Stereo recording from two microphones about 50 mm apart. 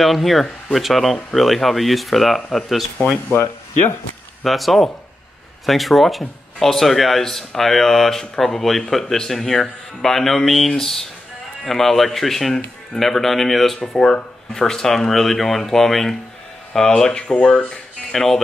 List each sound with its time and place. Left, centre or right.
0.0 s speech: centre
4.5 s speech: centre
17.6 s speech: centre